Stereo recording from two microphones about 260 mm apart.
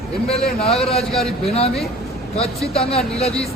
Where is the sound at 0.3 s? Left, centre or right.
Left.